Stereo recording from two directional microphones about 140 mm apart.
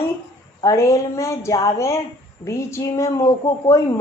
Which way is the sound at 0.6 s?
20° left (ahead or behind).